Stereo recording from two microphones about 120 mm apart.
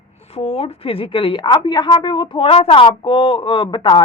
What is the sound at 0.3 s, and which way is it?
A woman's voice, 55° left (ahead or behind).